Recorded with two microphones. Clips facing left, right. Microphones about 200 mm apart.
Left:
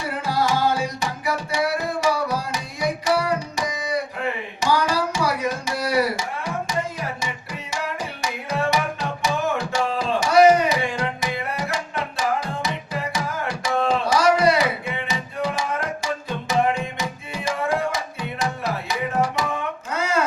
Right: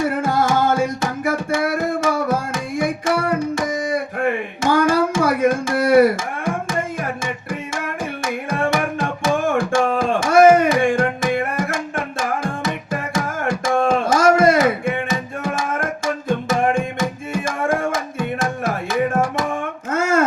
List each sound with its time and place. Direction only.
0.0 s music: 50° right (ahead or behind)